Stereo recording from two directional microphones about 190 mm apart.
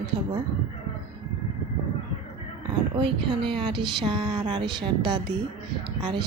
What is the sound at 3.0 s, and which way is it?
Speech, 25° right (ahead or behind).